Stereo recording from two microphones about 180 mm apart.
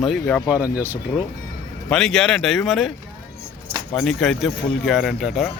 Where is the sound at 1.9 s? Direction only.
5° left (ahead or behind).